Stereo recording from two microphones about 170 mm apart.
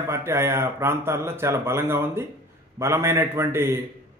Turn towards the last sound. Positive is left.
turn(degrees=-15)  # may be behind; listen again after turning